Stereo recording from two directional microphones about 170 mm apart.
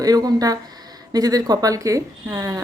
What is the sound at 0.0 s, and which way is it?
Speech, 20° right (ahead or behind).